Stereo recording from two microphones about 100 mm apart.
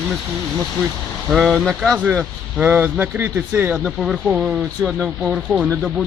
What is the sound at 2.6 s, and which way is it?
Speech, 15° right (ahead or behind).